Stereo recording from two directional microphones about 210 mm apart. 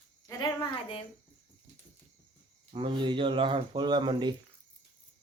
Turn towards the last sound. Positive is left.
turn(degrees=-20)  # may be behind; listen again after turning